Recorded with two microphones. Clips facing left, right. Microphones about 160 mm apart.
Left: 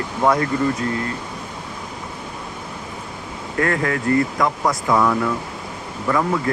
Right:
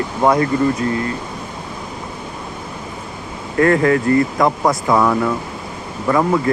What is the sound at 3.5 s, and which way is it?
Speech, 25° right (ahead or behind).